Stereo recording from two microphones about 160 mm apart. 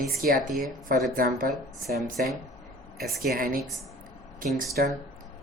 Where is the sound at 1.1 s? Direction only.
60° right (ahead or behind).